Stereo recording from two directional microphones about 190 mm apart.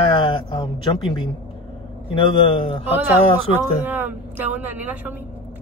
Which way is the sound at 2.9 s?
10° right (ahead or behind).